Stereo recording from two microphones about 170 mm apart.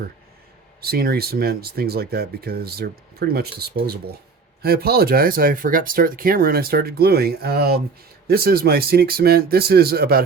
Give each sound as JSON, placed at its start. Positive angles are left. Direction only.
{"t": 0.8, "sound": "speech", "side_deg": -65}